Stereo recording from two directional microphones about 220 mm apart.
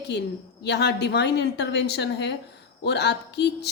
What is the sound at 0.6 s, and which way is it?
A woman's voice, 50° left (ahead or behind).